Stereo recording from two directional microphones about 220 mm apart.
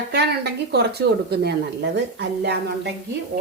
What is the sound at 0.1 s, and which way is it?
Speech, 50° right (ahead or behind).